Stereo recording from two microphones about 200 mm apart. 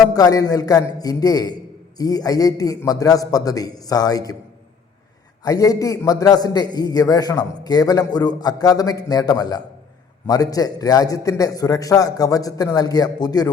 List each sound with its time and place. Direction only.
0.1 s a man's voice: 20° left (ahead or behind)
5.4 s a man's voice: 15° left (ahead or behind)